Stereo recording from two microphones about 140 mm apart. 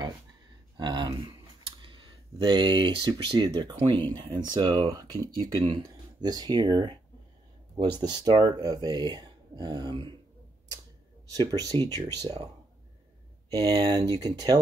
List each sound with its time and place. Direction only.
0.7 s a sound: 30° right (ahead or behind)
1.8 s speech: 35° right (ahead or behind)
11.2 s speech: 25° right (ahead or behind)
13.5 s speech: 25° right (ahead or behind)